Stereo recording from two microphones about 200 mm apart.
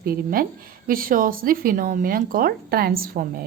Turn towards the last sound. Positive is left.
turn(degrees=-45)  # may be behind; listen again after turning